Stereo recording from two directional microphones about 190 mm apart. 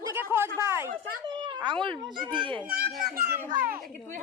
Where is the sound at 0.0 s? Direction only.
10° right (ahead or behind).